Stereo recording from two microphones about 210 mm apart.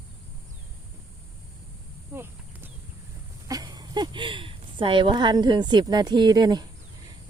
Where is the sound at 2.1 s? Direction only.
10° right (ahead or behind).